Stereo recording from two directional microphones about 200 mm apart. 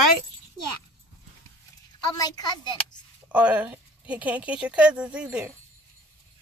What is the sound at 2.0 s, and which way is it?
Speech, 20° left (ahead or behind).